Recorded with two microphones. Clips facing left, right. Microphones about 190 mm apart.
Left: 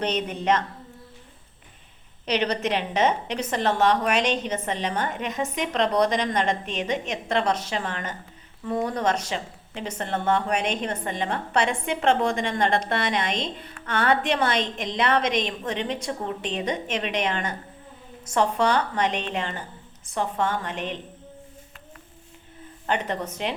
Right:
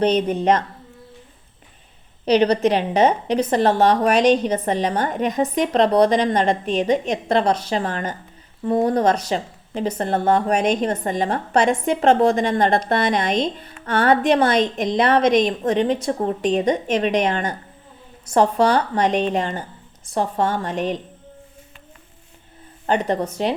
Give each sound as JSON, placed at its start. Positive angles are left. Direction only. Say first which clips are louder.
{"t": 0.0, "sound": "a woman's voice", "louder": "right 8 dB", "side_deg": -35}
{"t": 2.2, "sound": "a woman's voice", "louder": "right 9 dB", "side_deg": -35}
{"t": 22.9, "sound": "a woman's voice", "louder": "right 7 dB", "side_deg": -35}